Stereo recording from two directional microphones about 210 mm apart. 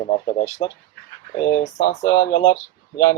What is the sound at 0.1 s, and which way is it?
Speech, 35° left (ahead or behind).